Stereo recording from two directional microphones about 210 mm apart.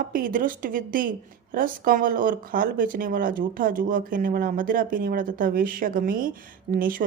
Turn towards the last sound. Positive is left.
turn(degrees=-40)  # may be behind; listen again after turning